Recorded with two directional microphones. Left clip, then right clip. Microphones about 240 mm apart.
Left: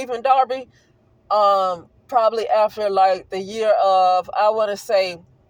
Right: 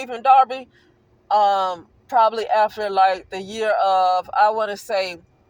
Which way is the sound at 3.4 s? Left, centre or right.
Left.